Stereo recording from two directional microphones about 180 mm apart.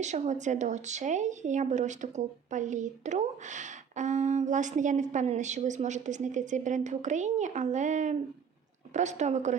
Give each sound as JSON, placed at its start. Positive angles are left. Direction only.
{"t": 0.0, "sound": "speech", "side_deg": -40}